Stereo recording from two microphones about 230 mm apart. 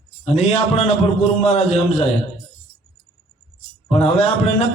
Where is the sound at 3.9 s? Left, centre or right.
Left.